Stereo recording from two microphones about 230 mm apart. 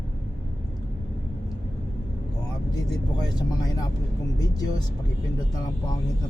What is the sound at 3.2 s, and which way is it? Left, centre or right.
Vehicle, centre.